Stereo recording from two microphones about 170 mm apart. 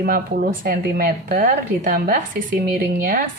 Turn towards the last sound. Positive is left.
turn(degrees=-55)  # may be behind; listen again after turning